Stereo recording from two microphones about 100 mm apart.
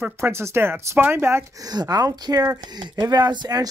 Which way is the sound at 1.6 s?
40° right (ahead or behind).